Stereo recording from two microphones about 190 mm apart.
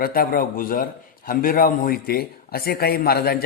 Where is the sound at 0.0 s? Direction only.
50° left (ahead or behind).